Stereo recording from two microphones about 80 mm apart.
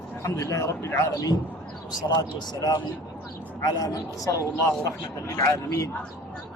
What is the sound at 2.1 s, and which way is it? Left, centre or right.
A man's voice, left.